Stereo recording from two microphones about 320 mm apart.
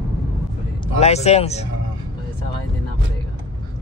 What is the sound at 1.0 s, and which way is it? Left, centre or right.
Speech, centre.